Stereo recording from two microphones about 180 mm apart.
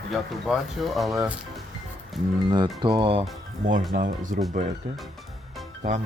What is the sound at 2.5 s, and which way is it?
Speech, 25° right (ahead or behind).